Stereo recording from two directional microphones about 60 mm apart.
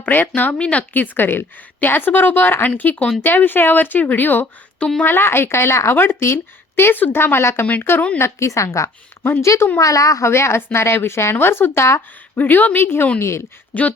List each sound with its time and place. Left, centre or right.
0.0 s a woman's voice: left
8.2 s a woman's voice: left
9.7 s a woman's voice: left
10.2 s a woman's voice: left
12.4 s a woman's voice: left
13.1 s a woman's voice: left
13.7 s speech: left